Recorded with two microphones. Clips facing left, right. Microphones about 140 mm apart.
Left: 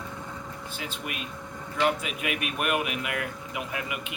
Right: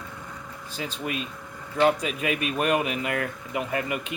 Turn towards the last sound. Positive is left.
turn(degrees=-40)  # may be behind; listen again after turning